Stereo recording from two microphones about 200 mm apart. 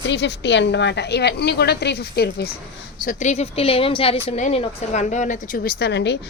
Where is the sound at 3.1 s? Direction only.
35° left (ahead or behind); by 6.1 s 60° left (ahead or behind).